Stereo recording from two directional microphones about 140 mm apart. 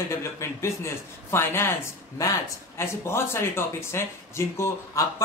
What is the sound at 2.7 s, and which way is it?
Speech, 20° left (ahead or behind).